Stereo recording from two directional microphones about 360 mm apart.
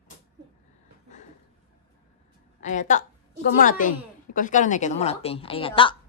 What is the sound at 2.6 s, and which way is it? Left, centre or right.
A woman's voice, centre.